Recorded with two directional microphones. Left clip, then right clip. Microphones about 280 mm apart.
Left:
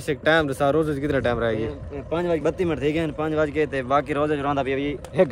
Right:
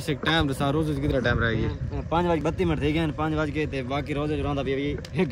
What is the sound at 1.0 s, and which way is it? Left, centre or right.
Speech, left.